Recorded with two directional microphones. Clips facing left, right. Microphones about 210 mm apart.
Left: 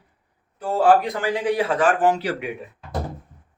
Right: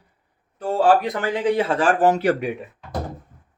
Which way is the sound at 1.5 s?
25° right (ahead or behind).